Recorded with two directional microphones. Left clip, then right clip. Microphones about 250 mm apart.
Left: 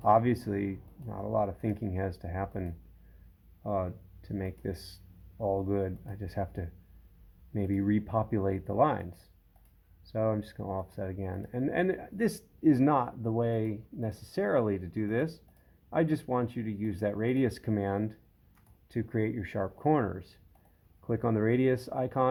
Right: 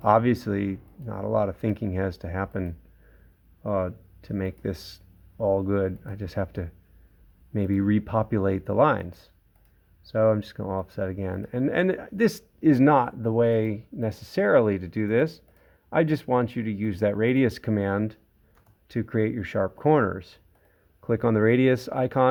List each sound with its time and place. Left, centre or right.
0.0 s speech: right